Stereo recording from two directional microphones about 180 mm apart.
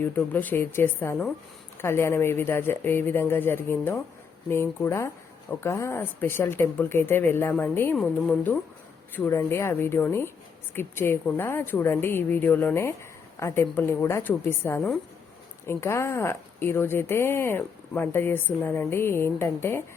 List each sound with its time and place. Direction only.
0.0 s a woman's voice: 10° left (ahead or behind)